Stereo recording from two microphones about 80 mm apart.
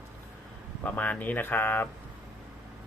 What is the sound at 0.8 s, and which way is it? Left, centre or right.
Speech, centre.